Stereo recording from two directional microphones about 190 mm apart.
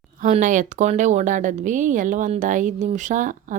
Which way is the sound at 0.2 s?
40° right (ahead or behind).